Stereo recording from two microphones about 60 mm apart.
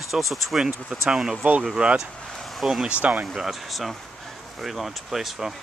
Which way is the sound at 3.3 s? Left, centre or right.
Centre.